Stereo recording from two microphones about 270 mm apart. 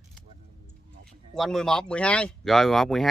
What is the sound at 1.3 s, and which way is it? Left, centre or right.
Speech, centre.